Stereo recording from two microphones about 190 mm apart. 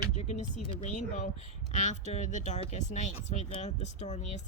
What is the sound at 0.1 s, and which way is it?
A woman's voice, 35° left (ahead or behind).